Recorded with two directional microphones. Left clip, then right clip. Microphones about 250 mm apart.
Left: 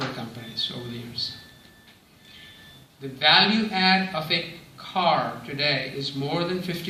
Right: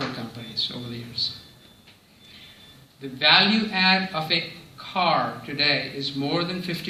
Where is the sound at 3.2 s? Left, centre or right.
Right.